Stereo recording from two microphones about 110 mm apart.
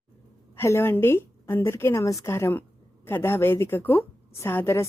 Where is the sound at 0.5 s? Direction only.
20° left (ahead or behind).